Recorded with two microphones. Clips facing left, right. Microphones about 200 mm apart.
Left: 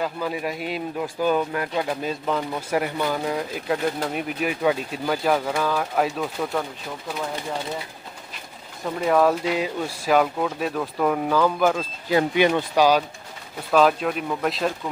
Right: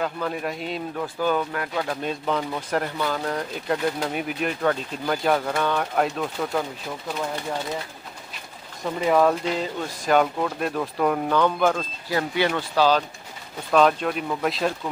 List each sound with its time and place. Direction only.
0.0 s speech: 5° left (ahead or behind)
8.8 s speech: centre (ahead or behind)
12.1 s speech: 20° left (ahead or behind)
13.7 s speech: centre (ahead or behind)